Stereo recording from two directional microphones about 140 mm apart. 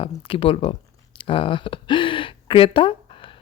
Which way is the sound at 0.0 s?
40° left (ahead or behind).